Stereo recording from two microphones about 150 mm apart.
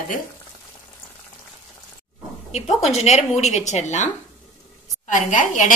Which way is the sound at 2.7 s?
45° left (ahead or behind).